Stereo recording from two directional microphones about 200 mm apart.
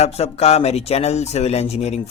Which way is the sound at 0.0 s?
30° left (ahead or behind).